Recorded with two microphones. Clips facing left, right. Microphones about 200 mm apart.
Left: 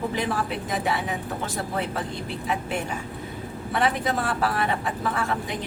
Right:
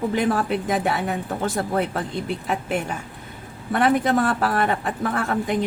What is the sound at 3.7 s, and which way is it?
A woman's voice, 50° right (ahead or behind).